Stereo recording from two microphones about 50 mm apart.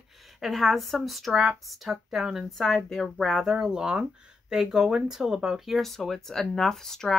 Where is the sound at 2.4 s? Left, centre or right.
Centre.